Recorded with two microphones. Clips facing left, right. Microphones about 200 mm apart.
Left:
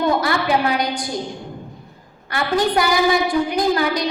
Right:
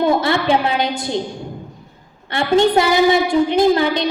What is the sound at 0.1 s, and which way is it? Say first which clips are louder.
A woman's voice: right 3 dB; 25° right (ahead or behind).